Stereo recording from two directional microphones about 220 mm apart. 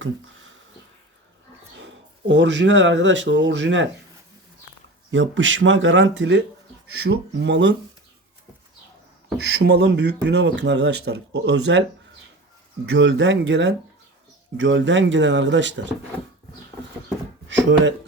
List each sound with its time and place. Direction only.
1.8 s speech: 55° right (ahead or behind)
5.1 s speech: 55° right (ahead or behind)
9.4 s speech: 50° right (ahead or behind)
12.9 s speech: 55° right (ahead or behind)
17.5 s speech: 55° right (ahead or behind)